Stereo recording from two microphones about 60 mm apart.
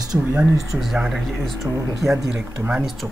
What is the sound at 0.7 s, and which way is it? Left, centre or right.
Speech, centre.